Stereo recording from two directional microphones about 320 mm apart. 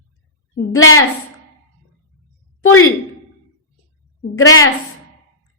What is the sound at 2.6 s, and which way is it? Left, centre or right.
Speech, left.